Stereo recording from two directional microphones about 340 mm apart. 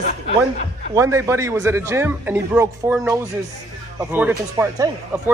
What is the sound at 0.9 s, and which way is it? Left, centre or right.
A man's voice, centre.